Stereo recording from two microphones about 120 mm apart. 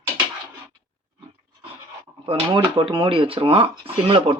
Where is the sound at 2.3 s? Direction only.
45° right (ahead or behind).